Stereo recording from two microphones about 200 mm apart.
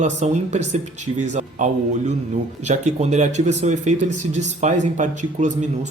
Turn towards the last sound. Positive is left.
turn(degrees=-35)  # may be behind; listen again after turning